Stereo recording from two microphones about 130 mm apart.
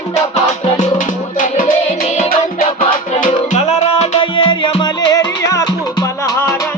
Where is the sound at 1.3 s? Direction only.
85° left.